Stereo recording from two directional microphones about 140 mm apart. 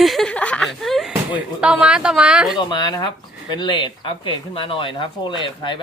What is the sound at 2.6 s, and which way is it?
Speech, 30° left (ahead or behind).